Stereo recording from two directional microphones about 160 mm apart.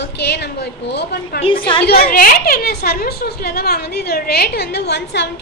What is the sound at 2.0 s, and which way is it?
A woman's voice, 65° left (ahead or behind).